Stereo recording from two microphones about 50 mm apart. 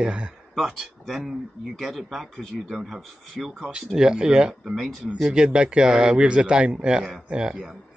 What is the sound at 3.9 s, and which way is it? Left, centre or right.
Speech, centre.